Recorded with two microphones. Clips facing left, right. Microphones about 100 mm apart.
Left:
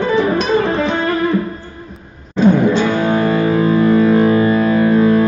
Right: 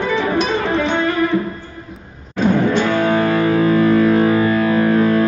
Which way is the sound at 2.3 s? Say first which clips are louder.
Left 3 dB; 15° left (ahead or behind).